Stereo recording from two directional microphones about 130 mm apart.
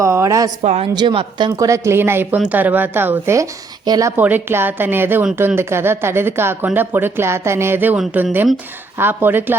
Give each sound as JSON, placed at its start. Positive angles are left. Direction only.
{"t": 0.0, "sound": "a woman's voice", "side_deg": -25}
{"t": 0.6, "sound": "speech", "side_deg": -60}
{"t": 0.9, "sound": "a woman's voice", "side_deg": -40}
{"t": 4.2, "sound": "a woman's voice", "side_deg": -15}